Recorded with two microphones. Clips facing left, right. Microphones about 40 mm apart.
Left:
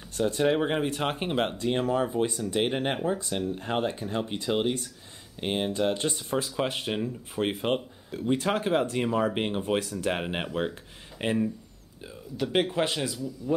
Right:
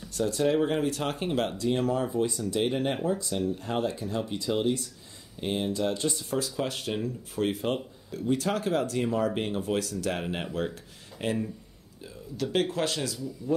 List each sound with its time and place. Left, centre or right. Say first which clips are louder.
0.1 s speech: left 1 dB; left
12.4 s speech: left 2 dB; centre